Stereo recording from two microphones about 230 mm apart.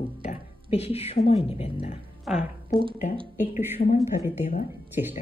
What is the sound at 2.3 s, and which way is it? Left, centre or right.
Speech, centre.